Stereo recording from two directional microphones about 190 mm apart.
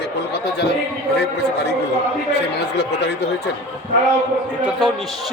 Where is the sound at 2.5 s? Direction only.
60° left (ahead or behind).